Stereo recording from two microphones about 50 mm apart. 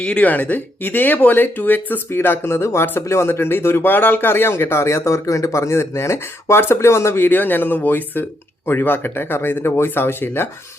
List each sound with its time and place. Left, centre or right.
0.0 s speech: left
0.3 s speech: left
2.0 s a man's voice: left
3.8 s a man's voice: left
7.3 s speech: left